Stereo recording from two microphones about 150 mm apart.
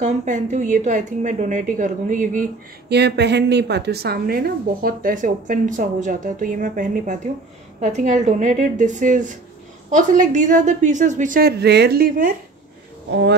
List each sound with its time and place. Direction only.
0.0 s speech: 55° right (ahead or behind)
2.9 s speech: 90° right